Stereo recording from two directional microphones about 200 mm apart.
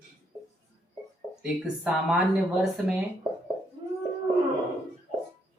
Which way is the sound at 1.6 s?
5° right (ahead or behind).